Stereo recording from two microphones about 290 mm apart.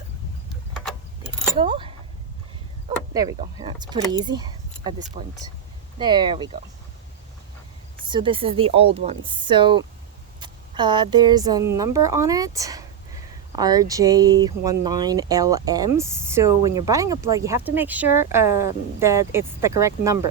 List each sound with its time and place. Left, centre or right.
1.5 s speech: centre
3.2 s speech: centre
8.1 s speech: centre